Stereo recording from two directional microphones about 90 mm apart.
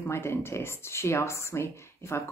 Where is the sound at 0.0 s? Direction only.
30° left (ahead or behind).